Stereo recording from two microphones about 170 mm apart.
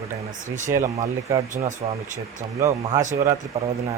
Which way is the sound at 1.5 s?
45° right (ahead or behind).